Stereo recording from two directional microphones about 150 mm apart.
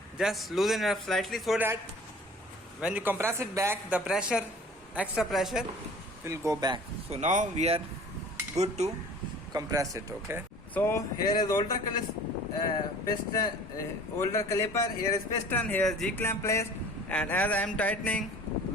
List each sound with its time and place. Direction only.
0.2 s a man's voice: centre (ahead or behind)
1.5 s speech: 15° right (ahead or behind)
2.8 s a man's voice: 10° right (ahead or behind)
6.2 s speech: 20° right (ahead or behind)
7.1 s speech: 50° right (ahead or behind)
9.5 s speech: 25° right (ahead or behind)
10.8 s a man's voice: 15° left (ahead or behind)
16.2 s a man's voice: 15° left (ahead or behind)